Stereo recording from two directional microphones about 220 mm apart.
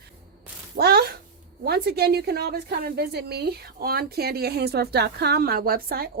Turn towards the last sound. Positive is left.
turn(degrees=-45)  # may be behind; listen again after turning